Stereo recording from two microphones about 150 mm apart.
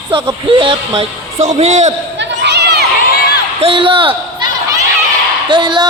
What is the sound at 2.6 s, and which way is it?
Crowd, 90° right.